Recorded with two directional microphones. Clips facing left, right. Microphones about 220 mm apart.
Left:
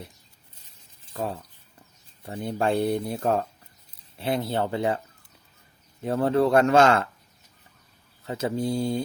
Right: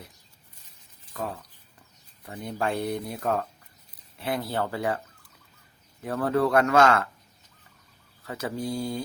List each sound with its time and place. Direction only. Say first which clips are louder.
1.1 s speech: left 3 dB; 30° left (ahead or behind)
6.0 s speech: left 3 dB; 25° left (ahead or behind)
8.2 s speech: left 4 dB; 25° left (ahead or behind)